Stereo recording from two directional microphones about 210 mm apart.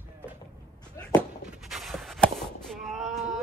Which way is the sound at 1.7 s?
Centre (ahead or behind).